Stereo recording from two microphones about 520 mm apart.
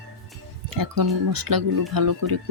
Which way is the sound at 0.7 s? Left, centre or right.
Right.